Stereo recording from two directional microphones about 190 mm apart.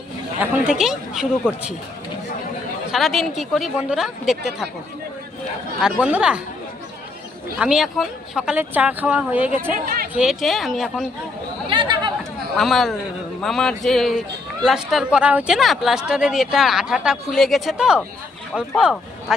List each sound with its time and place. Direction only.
0.3 s speech: 5° right (ahead or behind)
2.9 s speech: centre (ahead or behind)
5.8 s speech: 5° right (ahead or behind)
7.6 s speech: 5° right (ahead or behind)
9.8 s a sound: 50° right (ahead or behind)
10.2 s speech: centre (ahead or behind)
11.7 s chatter: 25° right (ahead or behind)
12.5 s speech: centre (ahead or behind)